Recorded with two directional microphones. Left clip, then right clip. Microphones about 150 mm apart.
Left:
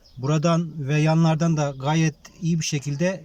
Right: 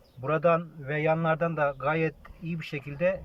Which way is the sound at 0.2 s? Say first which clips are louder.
Even; 45° left (ahead or behind).